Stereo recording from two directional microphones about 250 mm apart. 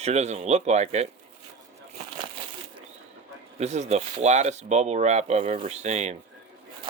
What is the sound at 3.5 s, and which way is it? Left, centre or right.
Speech, right.